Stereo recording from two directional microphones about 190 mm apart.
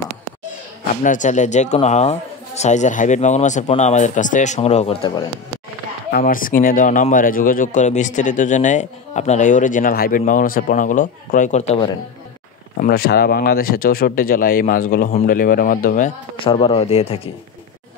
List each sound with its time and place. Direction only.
1.0 s speech: 40° left (ahead or behind)
6.1 s speech: 45° left (ahead or behind)
12.8 s speech: 55° left (ahead or behind)
16.3 s speech: 30° left (ahead or behind)